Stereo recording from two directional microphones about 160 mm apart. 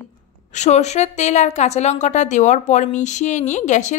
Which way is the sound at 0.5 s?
45° left (ahead or behind).